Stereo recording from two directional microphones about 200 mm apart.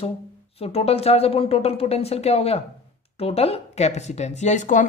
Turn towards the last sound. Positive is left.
turn(degrees=40)  # may be behind; listen again after turning